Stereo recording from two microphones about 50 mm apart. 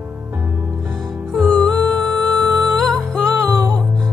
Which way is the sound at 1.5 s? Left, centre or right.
Centre.